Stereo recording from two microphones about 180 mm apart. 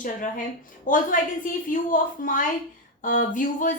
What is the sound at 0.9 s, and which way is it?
Speech, 45° left (ahead or behind).